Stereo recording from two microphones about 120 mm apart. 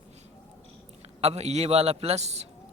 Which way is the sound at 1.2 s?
65° right (ahead or behind).